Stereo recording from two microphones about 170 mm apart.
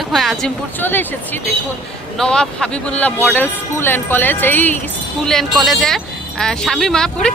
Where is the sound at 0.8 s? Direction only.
10° left (ahead or behind).